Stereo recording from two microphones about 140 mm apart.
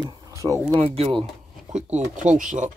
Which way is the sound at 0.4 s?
10° right (ahead or behind).